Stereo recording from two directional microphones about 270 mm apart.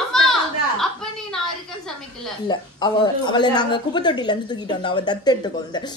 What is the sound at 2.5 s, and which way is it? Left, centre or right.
A woman's voice, centre.